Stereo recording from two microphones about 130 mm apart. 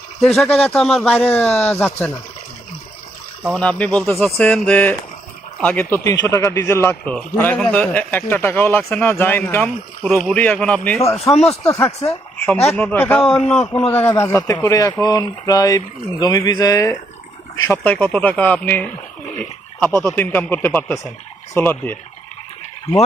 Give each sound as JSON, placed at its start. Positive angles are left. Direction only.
{"t": 0.2, "sound": "speech", "side_deg": 0}
{"t": 1.1, "sound": "a man's voice", "side_deg": 10}
{"t": 3.5, "sound": "a man's voice", "side_deg": 10}
{"t": 9.6, "sound": "a man's voice", "side_deg": 5}
{"t": 11.3, "sound": "speech", "side_deg": 50}
{"t": 11.6, "sound": "a man's voice", "side_deg": 20}
{"t": 13.2, "sound": "speech", "side_deg": 45}
{"t": 13.8, "sound": "a man's voice", "side_deg": 15}
{"t": 17.7, "sound": "a man's voice", "side_deg": 10}